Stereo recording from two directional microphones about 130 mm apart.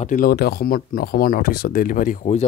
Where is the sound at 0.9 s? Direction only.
90° left.